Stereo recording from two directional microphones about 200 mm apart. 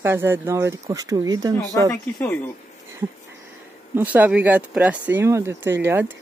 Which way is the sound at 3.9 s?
10° right (ahead or behind).